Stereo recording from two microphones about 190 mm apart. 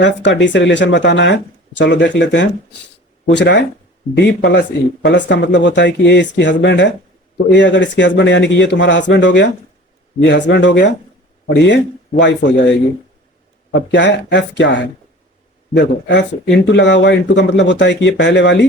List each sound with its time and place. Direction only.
0.0 s speech: 70° left (ahead or behind)